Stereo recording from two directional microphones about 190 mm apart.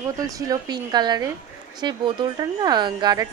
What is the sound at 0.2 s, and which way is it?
Speech, 20° right (ahead or behind).